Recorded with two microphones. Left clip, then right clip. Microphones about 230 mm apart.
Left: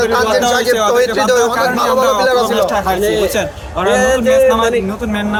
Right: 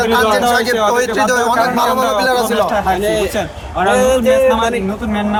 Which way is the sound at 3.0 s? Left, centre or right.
Right.